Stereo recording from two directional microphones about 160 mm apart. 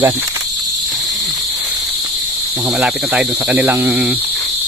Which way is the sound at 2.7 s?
5° right (ahead or behind).